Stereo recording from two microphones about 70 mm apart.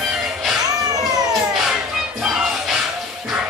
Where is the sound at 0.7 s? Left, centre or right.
Right.